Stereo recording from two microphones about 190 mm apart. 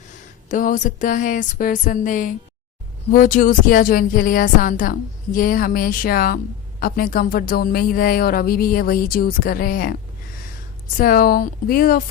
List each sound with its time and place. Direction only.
0.4 s a woman's voice: 45° left (ahead or behind)